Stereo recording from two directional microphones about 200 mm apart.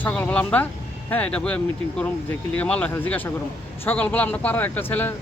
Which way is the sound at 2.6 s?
5° left (ahead or behind).